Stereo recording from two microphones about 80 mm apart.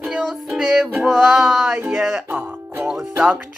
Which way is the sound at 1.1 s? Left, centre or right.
Centre.